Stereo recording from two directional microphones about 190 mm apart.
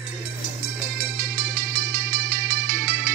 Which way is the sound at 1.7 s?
60° right (ahead or behind).